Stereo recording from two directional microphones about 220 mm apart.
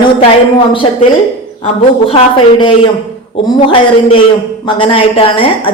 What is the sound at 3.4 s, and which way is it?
A woman's voice, 25° left (ahead or behind).